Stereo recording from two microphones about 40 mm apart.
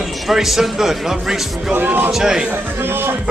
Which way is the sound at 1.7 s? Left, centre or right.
Right.